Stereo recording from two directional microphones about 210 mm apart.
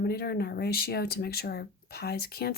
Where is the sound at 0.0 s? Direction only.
50° left (ahead or behind).